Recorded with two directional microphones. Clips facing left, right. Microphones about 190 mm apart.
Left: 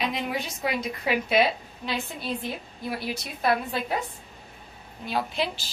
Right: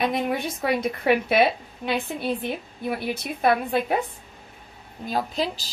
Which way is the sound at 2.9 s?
55° right (ahead or behind).